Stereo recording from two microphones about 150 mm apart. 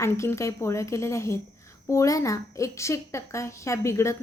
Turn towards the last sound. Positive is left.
turn(degrees=20)  # may be behind; listen again after turning